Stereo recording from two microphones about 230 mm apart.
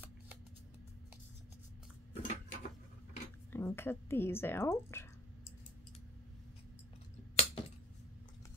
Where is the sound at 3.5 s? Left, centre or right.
Centre.